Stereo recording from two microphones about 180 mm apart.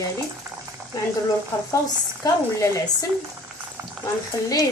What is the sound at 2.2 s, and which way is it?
Speech, 15° left (ahead or behind).